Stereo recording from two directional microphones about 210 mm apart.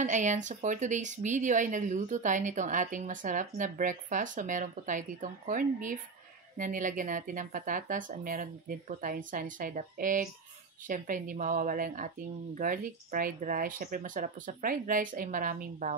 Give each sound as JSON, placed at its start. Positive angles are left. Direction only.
{"t": 0.0, "sound": "speech", "side_deg": -35}